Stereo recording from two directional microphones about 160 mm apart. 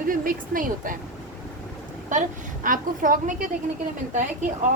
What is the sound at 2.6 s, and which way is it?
Speech, 60° right (ahead or behind).